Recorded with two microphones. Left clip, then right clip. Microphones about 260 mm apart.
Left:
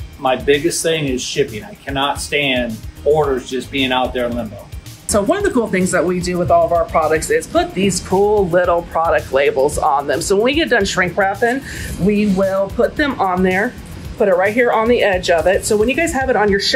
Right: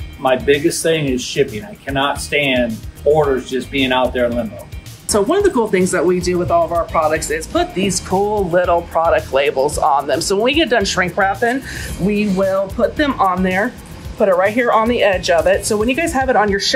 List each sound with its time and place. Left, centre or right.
0.2 s speech: centre